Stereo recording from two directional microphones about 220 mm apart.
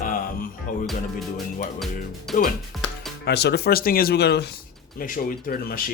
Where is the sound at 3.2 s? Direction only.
50° left (ahead or behind).